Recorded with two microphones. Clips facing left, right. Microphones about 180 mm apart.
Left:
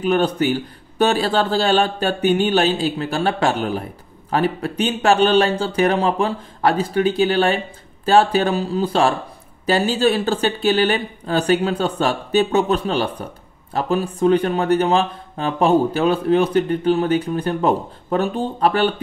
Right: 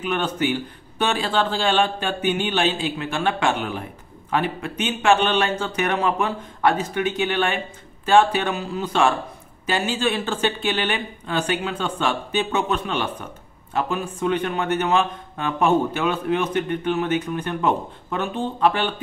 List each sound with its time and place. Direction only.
0.0 s speech: 35° left (ahead or behind)